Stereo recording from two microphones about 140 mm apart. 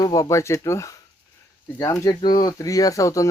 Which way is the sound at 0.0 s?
25° left (ahead or behind).